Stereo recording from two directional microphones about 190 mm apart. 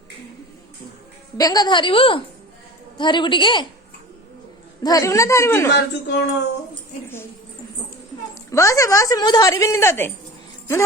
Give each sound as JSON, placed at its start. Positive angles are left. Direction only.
{"t": 1.4, "sound": "a woman's voice", "side_deg": 20}
{"t": 4.8, "sound": "a woman's voice", "side_deg": 20}
{"t": 5.7, "sound": "speech", "side_deg": 65}
{"t": 8.4, "sound": "a woman's voice", "side_deg": 15}